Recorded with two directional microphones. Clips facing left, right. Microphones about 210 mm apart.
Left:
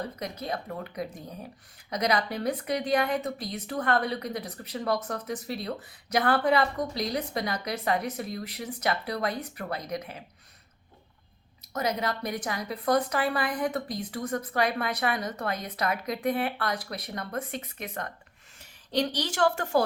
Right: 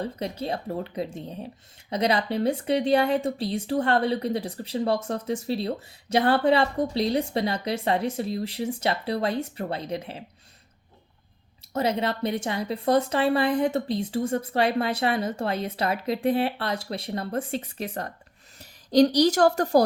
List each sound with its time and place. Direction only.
0.0 s speech: 30° right (ahead or behind)
11.7 s a woman's voice: 30° right (ahead or behind)